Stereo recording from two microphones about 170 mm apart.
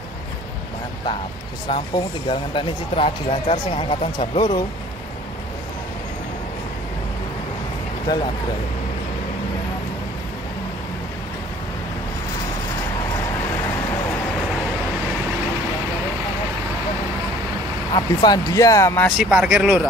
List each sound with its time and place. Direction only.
1.7 s speech: 30° left (ahead or behind)
17.9 s speech: 25° left (ahead or behind)
19.1 s speech: 5° right (ahead or behind)